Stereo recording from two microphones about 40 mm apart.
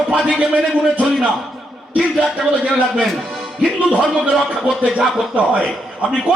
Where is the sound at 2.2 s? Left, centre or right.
Centre.